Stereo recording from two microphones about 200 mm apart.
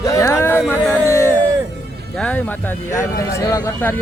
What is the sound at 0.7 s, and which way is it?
Music, 15° left (ahead or behind).